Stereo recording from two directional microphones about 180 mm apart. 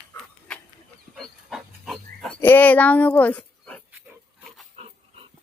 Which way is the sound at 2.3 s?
10° left (ahead or behind).